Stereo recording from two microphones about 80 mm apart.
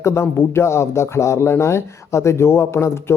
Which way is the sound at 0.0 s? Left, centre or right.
Left.